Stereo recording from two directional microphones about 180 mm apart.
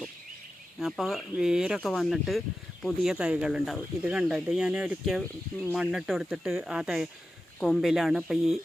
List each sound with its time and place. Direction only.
0.8 s speech: centre (ahead or behind)